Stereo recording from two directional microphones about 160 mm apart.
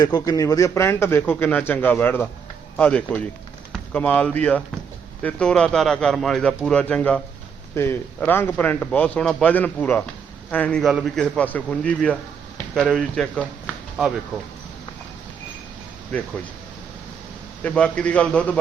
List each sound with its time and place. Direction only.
0.0 s speech: 25° left (ahead or behind); by 14.1 s centre (ahead or behind)
17.6 s speech: 5° left (ahead or behind)